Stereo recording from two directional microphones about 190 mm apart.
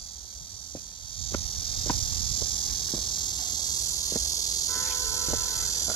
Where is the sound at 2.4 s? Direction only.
25° left (ahead or behind).